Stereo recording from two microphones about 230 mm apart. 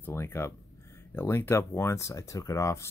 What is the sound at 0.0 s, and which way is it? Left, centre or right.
Speech, centre.